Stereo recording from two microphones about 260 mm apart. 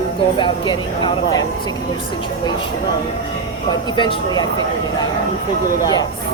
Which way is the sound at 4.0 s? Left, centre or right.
Centre.